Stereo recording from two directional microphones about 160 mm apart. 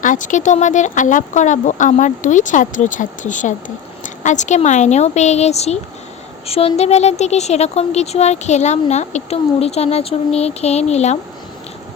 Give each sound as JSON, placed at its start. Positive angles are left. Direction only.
{"t": 0.0, "sound": "speech", "side_deg": 55}